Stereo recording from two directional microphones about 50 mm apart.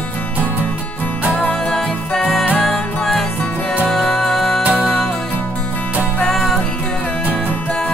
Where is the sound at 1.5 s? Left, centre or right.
Centre.